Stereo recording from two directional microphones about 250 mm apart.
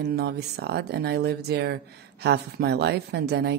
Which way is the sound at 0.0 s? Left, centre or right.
Right.